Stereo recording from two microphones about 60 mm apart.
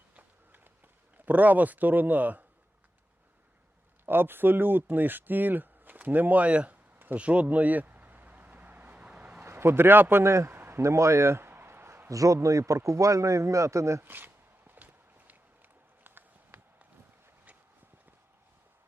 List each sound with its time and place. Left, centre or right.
0.2 s run: right
1.1 s speech: right
4.0 s speech: right
7.2 s vehicle: right
9.0 s a sound: centre
9.4 s a man's voice: right
10.2 s a man's voice: right
10.5 s a sound: right
10.8 s a sound: right
12.0 s a man's voice: right
14.0 s speech: right
16.0 s a sound: right